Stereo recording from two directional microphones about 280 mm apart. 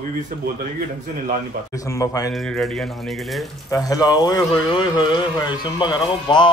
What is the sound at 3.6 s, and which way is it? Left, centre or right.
Speech, centre.